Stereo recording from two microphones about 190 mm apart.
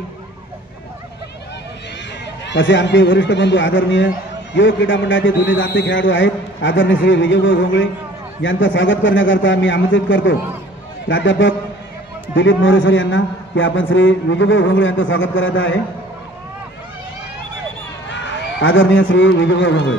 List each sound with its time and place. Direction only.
2.4 s a man's voice: 70° left (ahead or behind)
18.1 s a man's voice: 80° left